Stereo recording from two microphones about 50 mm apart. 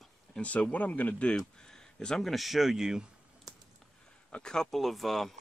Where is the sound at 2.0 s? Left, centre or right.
Centre.